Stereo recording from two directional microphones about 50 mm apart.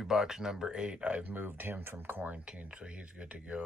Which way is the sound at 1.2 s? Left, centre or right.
Right.